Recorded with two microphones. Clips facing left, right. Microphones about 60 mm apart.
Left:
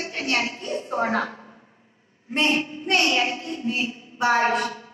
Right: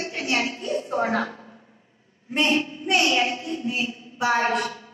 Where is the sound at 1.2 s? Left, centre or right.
Centre.